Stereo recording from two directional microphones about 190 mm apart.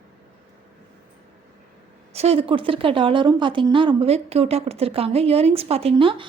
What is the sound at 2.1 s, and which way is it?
A woman's voice, 35° right (ahead or behind).